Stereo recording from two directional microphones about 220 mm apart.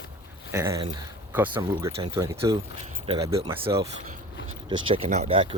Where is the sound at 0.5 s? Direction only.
15° right (ahead or behind).